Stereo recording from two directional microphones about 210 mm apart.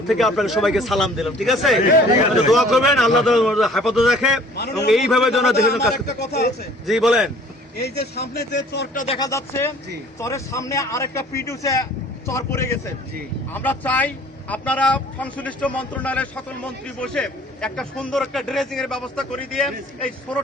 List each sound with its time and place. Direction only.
0.1 s speech: centre (ahead or behind)
4.5 s speech: 50° left (ahead or behind)
4.9 s speech: centre (ahead or behind)
5.6 s speech: 50° left (ahead or behind)
6.8 s speech: centre (ahead or behind)
7.8 s speech: 50° left (ahead or behind)
9.0 s speech: 20° left (ahead or behind); by 20.4 s 5° left (ahead or behind)